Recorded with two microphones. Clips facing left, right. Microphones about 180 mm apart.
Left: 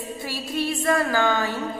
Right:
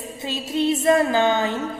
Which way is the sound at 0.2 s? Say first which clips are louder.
Right 5 dB; 20° right (ahead or behind).